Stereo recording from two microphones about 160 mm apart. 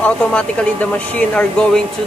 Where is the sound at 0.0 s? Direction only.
5° left (ahead or behind).